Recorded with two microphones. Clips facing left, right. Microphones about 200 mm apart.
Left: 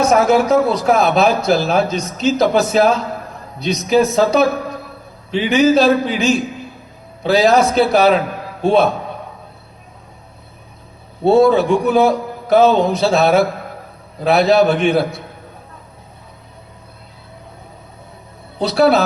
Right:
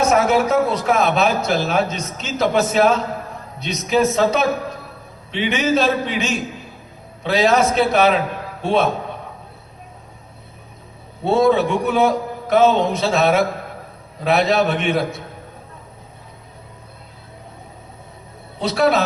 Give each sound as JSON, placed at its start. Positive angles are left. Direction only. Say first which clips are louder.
{"t": 0.0, "sound": "a man's voice", "louder": "left 3 dB", "side_deg": 30}
{"t": 11.2, "sound": "a man's voice", "louder": "left 4 dB", "side_deg": 30}
{"t": 18.6, "sound": "a man's voice", "louder": "left 4 dB", "side_deg": 35}